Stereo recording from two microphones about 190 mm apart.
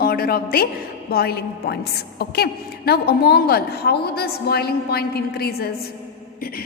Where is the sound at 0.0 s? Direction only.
50° left (ahead or behind).